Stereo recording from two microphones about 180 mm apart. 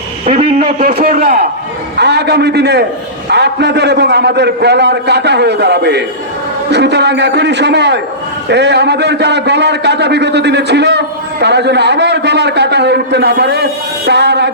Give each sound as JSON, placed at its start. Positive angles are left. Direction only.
{"t": 0.3, "sound": "a man's voice", "side_deg": -45}
{"t": 2.0, "sound": "a man's voice", "side_deg": -70}